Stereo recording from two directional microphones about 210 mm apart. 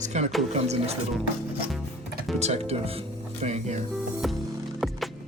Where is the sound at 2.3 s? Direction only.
30° right (ahead or behind).